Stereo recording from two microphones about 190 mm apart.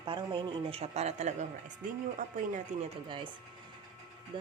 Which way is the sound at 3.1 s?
25° right (ahead or behind).